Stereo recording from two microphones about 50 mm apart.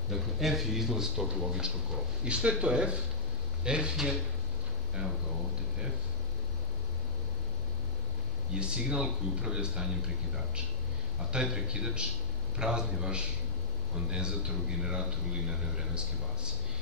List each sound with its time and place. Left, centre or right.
0.1 s speech: centre
8.5 s speech: centre